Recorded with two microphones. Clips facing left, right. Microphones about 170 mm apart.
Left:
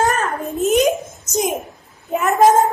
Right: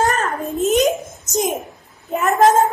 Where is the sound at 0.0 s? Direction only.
Centre (ahead or behind).